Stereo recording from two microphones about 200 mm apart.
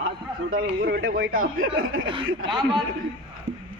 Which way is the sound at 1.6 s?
85° right.